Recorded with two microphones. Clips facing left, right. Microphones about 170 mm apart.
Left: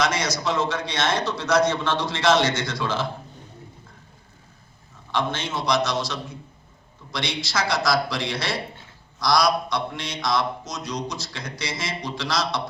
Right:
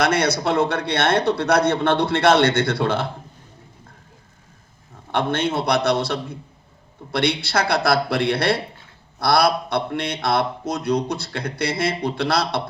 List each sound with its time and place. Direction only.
0.0 s a man's voice: 60° right (ahead or behind)
5.1 s a man's voice: 60° right (ahead or behind)